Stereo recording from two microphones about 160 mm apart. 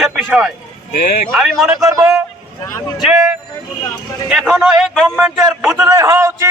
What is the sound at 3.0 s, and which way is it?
Speech, centre (ahead or behind).